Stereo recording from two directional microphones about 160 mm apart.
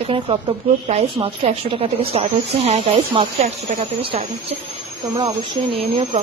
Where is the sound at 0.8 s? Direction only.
45° right (ahead or behind).